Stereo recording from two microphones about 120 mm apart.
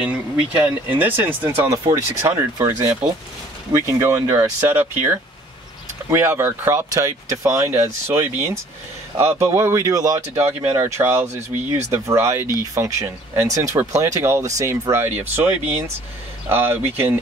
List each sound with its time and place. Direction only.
0.0 s speech: 10° right (ahead or behind); by 10.2 s 30° right (ahead or behind)
10.7 s speech: 20° right (ahead or behind)